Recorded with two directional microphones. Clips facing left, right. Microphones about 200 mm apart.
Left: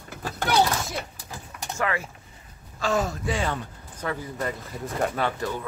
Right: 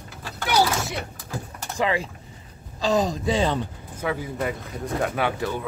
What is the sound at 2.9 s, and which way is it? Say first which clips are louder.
Speech: right 4 dB; 20° right (ahead or behind).